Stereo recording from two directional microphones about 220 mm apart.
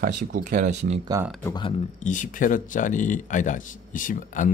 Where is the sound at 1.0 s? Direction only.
15° right (ahead or behind).